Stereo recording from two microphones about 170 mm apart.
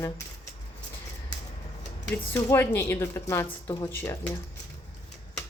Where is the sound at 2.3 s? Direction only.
15° left (ahead or behind).